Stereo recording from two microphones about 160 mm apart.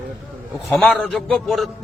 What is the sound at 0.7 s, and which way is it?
Speech, 5° left (ahead or behind).